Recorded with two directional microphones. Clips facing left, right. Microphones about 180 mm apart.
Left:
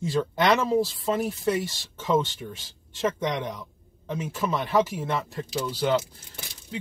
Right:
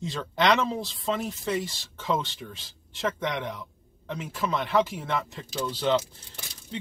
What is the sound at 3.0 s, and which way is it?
Speech, 15° left (ahead or behind).